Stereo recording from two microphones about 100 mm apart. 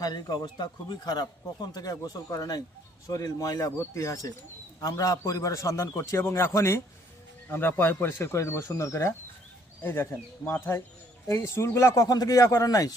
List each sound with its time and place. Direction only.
0.0 s a man's voice: 40° left (ahead or behind)